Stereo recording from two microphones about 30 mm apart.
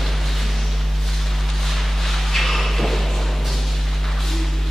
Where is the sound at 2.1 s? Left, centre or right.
Centre.